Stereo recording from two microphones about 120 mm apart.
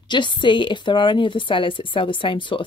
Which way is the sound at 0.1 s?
40° left (ahead or behind).